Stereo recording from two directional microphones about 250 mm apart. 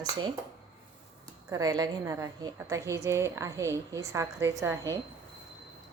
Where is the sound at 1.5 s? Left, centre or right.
Centre.